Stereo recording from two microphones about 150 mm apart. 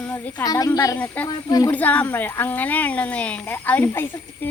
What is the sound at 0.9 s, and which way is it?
Speech, 10° left (ahead or behind).